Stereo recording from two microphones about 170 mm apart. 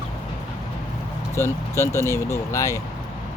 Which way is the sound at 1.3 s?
15° left (ahead or behind).